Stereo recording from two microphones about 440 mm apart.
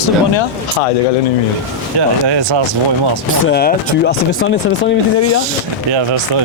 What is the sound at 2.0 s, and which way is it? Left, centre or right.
Speech, right.